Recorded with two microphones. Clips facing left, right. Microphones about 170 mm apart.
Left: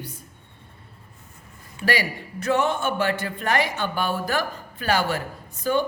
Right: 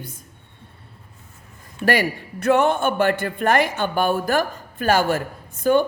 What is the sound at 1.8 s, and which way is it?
A man's voice, 55° right (ahead or behind).